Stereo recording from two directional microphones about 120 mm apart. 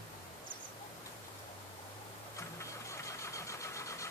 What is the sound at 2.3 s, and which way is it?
Vehicle, 25° left (ahead or behind).